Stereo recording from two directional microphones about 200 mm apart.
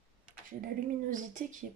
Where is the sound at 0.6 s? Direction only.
40° right (ahead or behind).